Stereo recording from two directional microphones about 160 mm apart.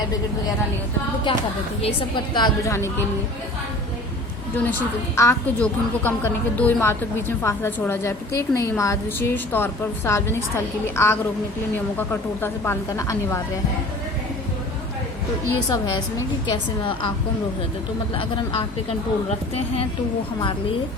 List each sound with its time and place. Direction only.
1.3 s a woman's voice: 30° left (ahead or behind)
4.5 s a woman's voice: 10° left (ahead or behind)
15.7 s a woman's voice: 20° left (ahead or behind)
18.1 s speech: 35° left (ahead or behind)